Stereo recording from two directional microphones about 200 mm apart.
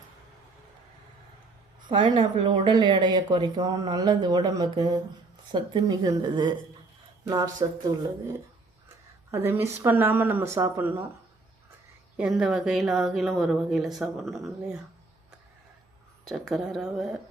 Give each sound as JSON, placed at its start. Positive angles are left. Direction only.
{"t": 1.9, "sound": "a woman's voice", "side_deg": -25}
{"t": 9.3, "sound": "speech", "side_deg": -10}
{"t": 12.1, "sound": "speech", "side_deg": -5}
{"t": 16.3, "sound": "speech", "side_deg": 0}